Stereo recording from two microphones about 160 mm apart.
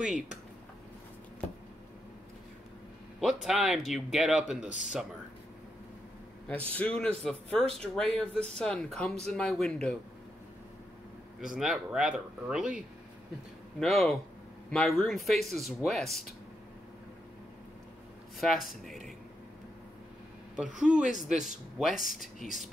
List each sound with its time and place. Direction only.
3.4 s speech: centre (ahead or behind)
4.6 s speech: 50° left (ahead or behind)
6.4 s speech: 10° left (ahead or behind)
11.5 s speech: 5° right (ahead or behind)
18.4 s speech: centre (ahead or behind)
20.5 s speech: 5° right (ahead or behind)